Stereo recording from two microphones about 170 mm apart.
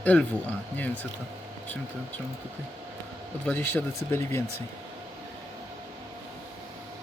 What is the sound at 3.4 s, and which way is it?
Speech, 10° left (ahead or behind).